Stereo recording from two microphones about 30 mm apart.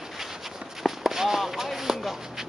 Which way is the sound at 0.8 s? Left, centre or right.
Centre.